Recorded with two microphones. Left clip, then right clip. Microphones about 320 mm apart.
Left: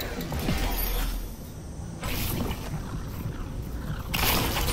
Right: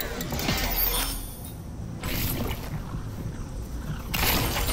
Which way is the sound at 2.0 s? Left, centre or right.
Centre.